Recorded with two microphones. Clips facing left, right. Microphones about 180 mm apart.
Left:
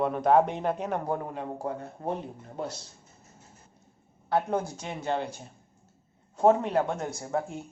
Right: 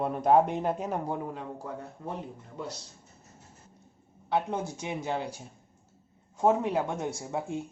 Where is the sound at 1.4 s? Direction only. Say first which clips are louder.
Left 5 dB; 55° left (ahead or behind).